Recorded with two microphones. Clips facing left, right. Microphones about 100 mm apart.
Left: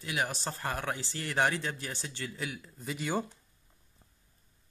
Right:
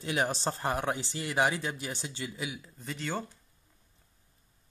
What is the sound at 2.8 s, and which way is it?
Speech, 10° left (ahead or behind).